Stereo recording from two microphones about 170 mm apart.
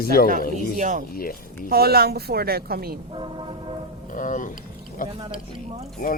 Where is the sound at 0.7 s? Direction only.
50° right (ahead or behind).